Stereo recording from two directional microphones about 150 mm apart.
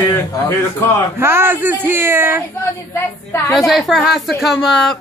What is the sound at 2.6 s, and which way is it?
Speech, 15° left (ahead or behind).